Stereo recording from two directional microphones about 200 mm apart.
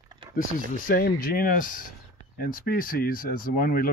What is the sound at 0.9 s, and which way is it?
Speech, 45° left (ahead or behind).